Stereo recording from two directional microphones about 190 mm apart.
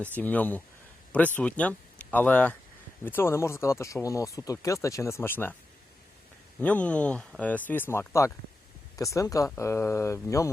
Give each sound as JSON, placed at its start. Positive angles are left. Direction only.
{"t": 0.2, "sound": "speech", "side_deg": 10}
{"t": 6.6, "sound": "speech", "side_deg": 5}